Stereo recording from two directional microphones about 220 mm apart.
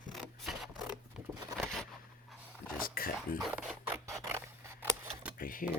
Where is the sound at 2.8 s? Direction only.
40° left (ahead or behind).